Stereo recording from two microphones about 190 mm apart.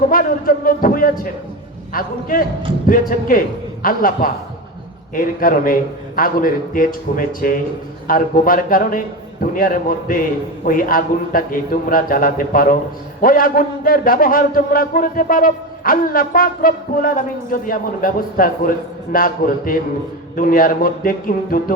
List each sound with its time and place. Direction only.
0.1 s a man's voice: 50° left (ahead or behind)